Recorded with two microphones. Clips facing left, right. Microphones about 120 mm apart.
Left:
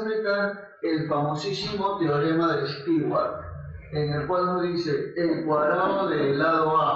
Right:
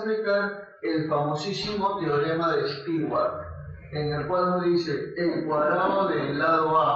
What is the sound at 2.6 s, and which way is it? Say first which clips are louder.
A man's voice: left 2 dB; centre (ahead or behind).